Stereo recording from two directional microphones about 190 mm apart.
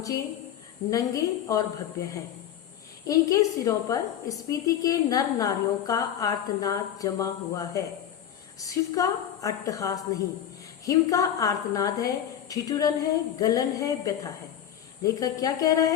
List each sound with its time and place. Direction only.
0.9 s a woman's voice: 15° left (ahead or behind)